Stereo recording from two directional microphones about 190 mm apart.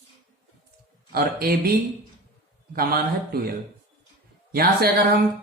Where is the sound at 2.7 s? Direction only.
50° right (ahead or behind).